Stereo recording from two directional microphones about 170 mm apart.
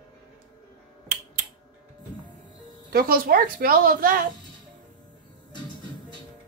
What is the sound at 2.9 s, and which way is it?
Speech, 60° right (ahead or behind).